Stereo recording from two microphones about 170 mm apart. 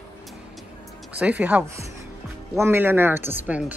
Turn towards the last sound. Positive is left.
turn(degrees=-10)  # may be behind; listen again after turning